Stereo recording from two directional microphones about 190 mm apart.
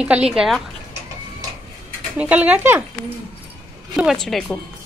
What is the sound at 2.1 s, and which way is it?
Speech, 5° right (ahead or behind).